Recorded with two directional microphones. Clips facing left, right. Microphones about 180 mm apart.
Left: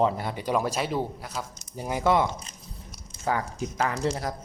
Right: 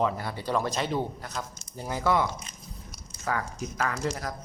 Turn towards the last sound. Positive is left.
turn(degrees=25)  # may be behind; listen again after turning